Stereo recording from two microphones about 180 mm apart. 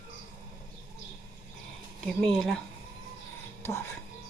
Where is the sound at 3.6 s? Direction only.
15° left (ahead or behind).